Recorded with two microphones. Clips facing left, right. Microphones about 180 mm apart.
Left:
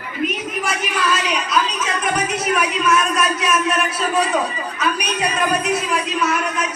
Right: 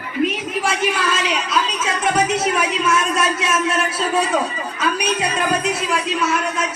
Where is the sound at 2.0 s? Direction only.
25° right (ahead or behind).